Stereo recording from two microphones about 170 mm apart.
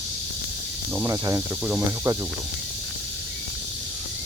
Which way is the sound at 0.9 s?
15° right (ahead or behind).